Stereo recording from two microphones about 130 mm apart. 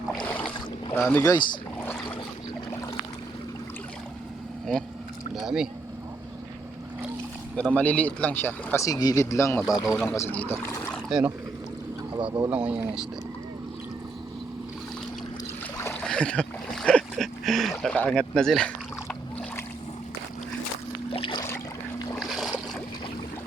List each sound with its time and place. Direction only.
0.9 s speech: 15° left (ahead or behind)
1.2 s speech: 30° left (ahead or behind)
5.3 s speech: 5° right (ahead or behind)
7.5 s speech: 10° left (ahead or behind); by 10.0 s 25° left (ahead or behind)
10.1 s speech: 15° left (ahead or behind)
12.5 s speech: 10° right (ahead or behind)
15.9 s boat: 5° left (ahead or behind)
21.1 s boat: 40° left (ahead or behind)
22.2 s boat: centre (ahead or behind)